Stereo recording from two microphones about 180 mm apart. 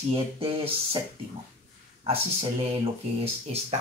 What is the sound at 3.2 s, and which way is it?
Speech, 35° right (ahead or behind).